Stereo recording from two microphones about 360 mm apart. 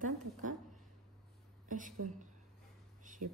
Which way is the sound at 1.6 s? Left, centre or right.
Right.